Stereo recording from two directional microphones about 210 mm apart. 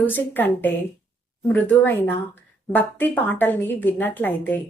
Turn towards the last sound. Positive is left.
turn(degrees=10)  # may be behind; listen again after turning